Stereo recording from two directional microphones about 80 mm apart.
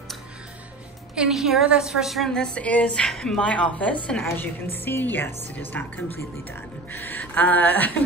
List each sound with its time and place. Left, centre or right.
1.1 s a woman's voice: centre
4.4 s a woman's voice: left